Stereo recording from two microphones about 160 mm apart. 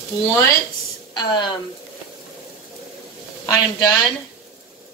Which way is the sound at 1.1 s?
25° left (ahead or behind).